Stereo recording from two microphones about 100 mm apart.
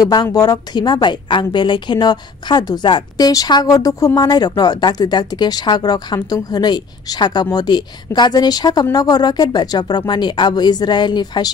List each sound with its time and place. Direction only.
0.0 s a woman's voice: 40° left (ahead or behind)